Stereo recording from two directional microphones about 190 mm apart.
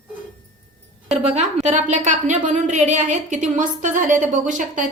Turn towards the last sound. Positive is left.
turn(degrees=-40)  # may be behind; listen again after turning